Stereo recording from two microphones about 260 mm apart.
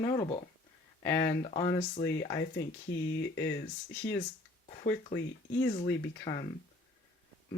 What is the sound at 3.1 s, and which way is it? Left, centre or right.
Speech, left.